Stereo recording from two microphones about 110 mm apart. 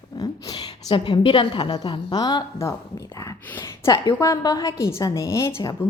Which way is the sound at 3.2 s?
25° left (ahead or behind).